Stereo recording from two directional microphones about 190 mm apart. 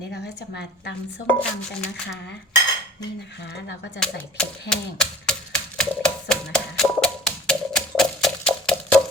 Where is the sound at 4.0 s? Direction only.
5° left (ahead or behind).